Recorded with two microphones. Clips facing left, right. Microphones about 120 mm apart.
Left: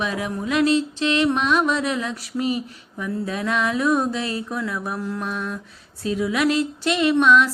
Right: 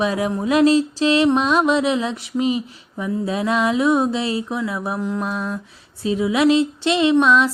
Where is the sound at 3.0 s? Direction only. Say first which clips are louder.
Right 4 dB; 25° right (ahead or behind).